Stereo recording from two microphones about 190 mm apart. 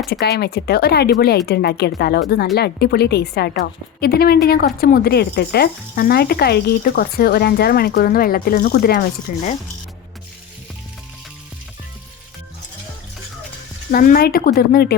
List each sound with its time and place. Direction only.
0.1 s a woman's voice: 60° left (ahead or behind)
13.9 s speech: 50° left (ahead or behind)